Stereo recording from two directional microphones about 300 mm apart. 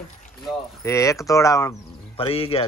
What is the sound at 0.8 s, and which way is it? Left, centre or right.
Speech, centre.